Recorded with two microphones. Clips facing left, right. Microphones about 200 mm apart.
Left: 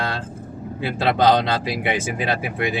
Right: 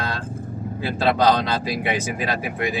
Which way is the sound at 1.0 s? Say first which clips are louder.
Left 1 dB; 25° left (ahead or behind).